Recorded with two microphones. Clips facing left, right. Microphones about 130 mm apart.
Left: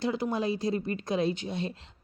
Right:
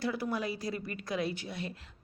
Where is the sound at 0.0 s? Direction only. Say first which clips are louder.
Left 4 dB; 25° left (ahead or behind).